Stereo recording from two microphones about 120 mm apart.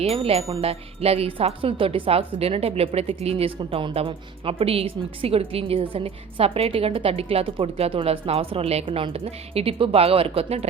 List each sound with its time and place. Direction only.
0.0 s a woman's voice: 60° right (ahead or behind)